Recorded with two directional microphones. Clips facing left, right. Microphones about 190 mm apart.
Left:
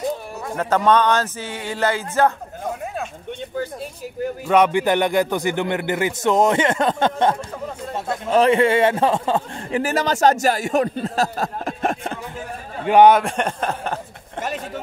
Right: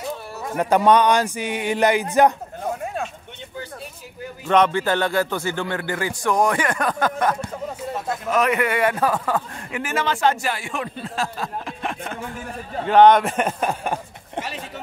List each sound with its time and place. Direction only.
0.6 s speech: 15° right (ahead or behind)
4.5 s a man's voice: 10° left (ahead or behind); by 12.2 s 40° left (ahead or behind)
12.8 s speech: 10° left (ahead or behind)
13.2 s a sound: 5° right (ahead or behind)